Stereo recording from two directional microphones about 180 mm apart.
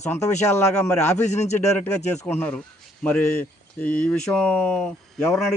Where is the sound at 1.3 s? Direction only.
40° left (ahead or behind).